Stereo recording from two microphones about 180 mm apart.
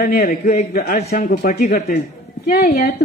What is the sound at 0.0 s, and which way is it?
A woman's voice, 60° left (ahead or behind).